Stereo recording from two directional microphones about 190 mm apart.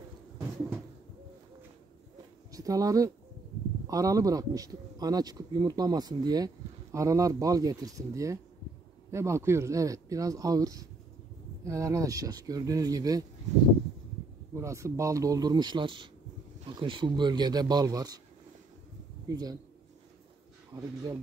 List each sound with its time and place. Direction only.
2.5 s a man's voice: 20° right (ahead or behind)
14.5 s a man's voice: 15° right (ahead or behind)
19.2 s speech: 20° right (ahead or behind)
20.7 s a man's voice: 20° right (ahead or behind)